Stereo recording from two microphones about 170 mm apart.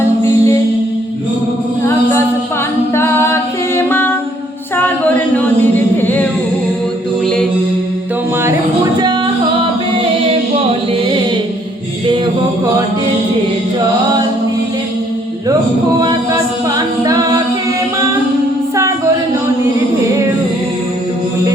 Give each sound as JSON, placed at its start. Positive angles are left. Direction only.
{"t": 0.3, "sound": "music", "side_deg": 20}
{"t": 2.9, "sound": "a capella", "side_deg": 15}
{"t": 6.0, "sound": "singing", "side_deg": 10}
{"t": 9.0, "sound": "music", "side_deg": -25}
{"t": 16.6, "sound": "a capella", "side_deg": -20}
{"t": 18.8, "sound": "a sound", "side_deg": -15}